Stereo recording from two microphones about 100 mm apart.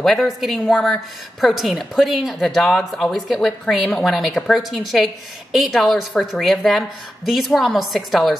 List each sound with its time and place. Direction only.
0.0 s a woman's voice: centre (ahead or behind)